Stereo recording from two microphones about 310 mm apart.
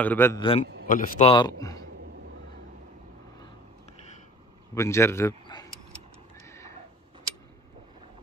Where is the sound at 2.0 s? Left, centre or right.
Right.